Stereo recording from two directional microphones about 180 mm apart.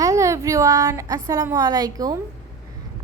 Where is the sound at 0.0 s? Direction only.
15° right (ahead or behind).